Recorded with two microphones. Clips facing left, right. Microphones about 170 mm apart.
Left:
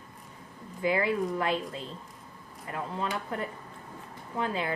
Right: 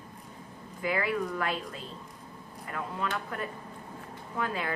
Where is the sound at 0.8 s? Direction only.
25° left (ahead or behind).